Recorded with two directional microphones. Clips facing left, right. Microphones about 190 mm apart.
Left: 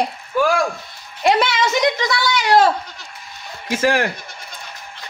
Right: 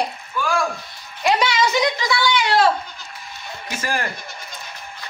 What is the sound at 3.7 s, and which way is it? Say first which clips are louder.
Speech: left 8 dB; 80° left.